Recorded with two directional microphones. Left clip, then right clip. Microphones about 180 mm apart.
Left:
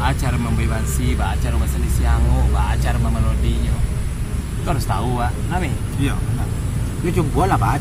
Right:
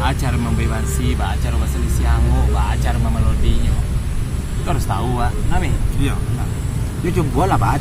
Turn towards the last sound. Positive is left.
turn(degrees=-20)  # may be behind; listen again after turning